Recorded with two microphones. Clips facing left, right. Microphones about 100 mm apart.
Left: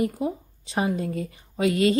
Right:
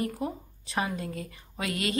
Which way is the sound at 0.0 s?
25° left (ahead or behind).